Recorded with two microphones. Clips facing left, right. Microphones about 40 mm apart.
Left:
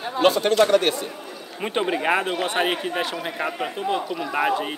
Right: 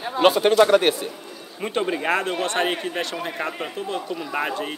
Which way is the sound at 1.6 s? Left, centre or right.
Centre.